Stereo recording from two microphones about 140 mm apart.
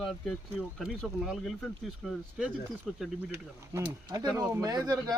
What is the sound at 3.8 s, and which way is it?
Speech, 25° right (ahead or behind).